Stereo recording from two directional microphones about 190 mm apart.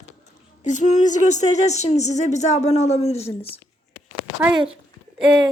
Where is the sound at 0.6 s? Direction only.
40° left (ahead or behind).